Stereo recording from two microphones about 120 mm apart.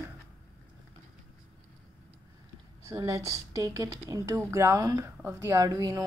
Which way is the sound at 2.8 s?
25° right (ahead or behind).